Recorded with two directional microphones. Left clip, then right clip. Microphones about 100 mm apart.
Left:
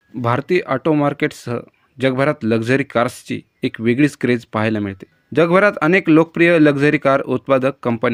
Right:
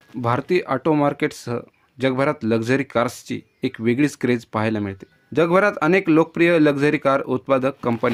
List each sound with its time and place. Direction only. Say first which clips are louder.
0.2 s speech: left 3 dB; 25° left (ahead or behind)